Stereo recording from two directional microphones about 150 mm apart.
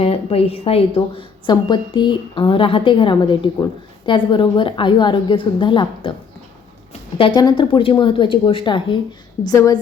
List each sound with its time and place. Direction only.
0.0 s a woman's voice: 40° left (ahead or behind)
7.2 s a woman's voice: 30° left (ahead or behind)